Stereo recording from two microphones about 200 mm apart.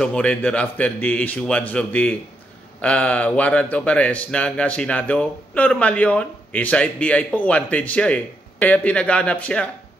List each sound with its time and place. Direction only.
0.0 s a man's voice: 5° left (ahead or behind)